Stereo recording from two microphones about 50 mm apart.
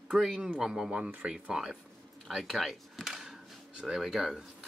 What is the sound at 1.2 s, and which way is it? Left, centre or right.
Speech, right.